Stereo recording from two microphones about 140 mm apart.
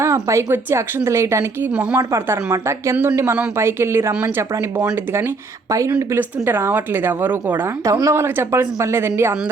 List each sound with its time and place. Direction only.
0.0 s speech: 20° right (ahead or behind)
1.7 s speech: 10° right (ahead or behind)
2.0 s speech: 20° right (ahead or behind)
6.0 s speech: 15° right (ahead or behind)